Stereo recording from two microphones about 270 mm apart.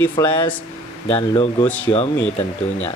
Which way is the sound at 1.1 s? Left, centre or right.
Centre.